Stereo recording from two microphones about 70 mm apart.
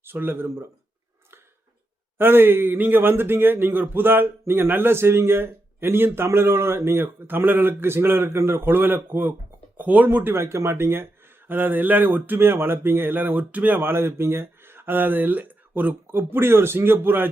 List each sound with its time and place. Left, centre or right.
0.0 s speech: right
2.1 s speech: right